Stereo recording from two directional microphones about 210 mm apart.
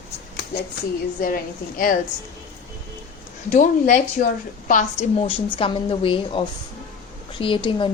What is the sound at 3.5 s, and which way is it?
A woman's voice, 35° left (ahead or behind).